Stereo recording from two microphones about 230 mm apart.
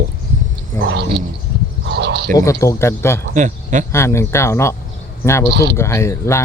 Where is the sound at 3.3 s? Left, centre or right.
Right.